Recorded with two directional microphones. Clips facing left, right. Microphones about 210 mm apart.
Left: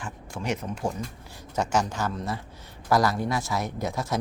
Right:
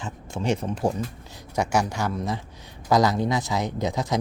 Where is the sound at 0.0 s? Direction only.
25° right (ahead or behind).